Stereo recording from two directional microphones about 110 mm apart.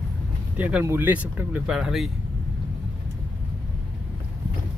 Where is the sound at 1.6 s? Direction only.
5° right (ahead or behind).